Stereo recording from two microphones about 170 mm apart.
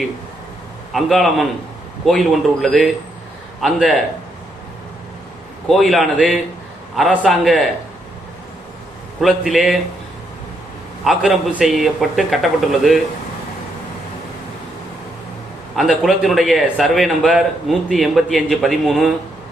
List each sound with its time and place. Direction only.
0.9 s a man's voice: centre (ahead or behind)
5.6 s a man's voice: centre (ahead or behind)
9.2 s a man's voice: centre (ahead or behind)
11.0 s a man's voice: centre (ahead or behind)
15.7 s a man's voice: centre (ahead or behind)